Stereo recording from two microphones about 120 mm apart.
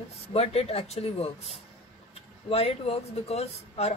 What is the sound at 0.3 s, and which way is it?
Speech, 60° left (ahead or behind).